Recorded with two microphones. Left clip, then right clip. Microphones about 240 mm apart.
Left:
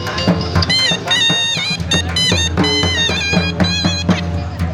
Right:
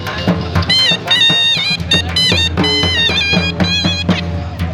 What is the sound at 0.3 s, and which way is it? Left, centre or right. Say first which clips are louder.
Music: right 2 dB; centre.